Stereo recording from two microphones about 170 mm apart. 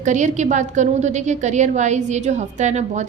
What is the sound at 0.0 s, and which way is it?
A woman's voice, 45° right (ahead or behind).